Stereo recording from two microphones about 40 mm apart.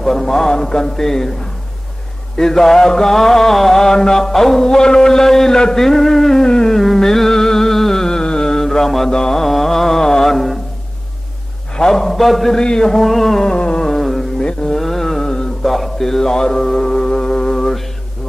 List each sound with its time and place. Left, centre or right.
0.0 s mantra: centre
2.3 s mantra: centre
6.8 s music: centre
8.2 s mantra: centre
10.3 s a sound: centre
11.7 s a man's voice: centre
12.5 s a man's voice: centre
12.9 s a man's voice: centre
13.4 s a sound: left
13.8 s a sound: centre
14.4 s mantra: centre